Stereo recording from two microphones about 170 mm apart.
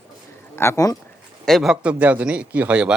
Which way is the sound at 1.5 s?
Centre (ahead or behind).